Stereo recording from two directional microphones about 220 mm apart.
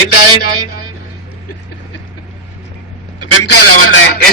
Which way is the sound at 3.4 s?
90° left.